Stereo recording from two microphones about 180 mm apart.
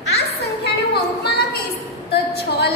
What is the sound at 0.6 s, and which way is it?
Speech, 65° left (ahead or behind).